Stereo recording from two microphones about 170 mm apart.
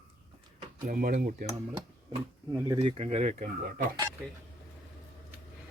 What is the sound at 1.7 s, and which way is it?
Speech, 15° right (ahead or behind).